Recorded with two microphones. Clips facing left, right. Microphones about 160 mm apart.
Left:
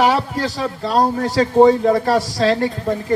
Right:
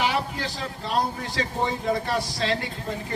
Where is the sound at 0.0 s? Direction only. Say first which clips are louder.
Left 9 dB; 40° left (ahead or behind).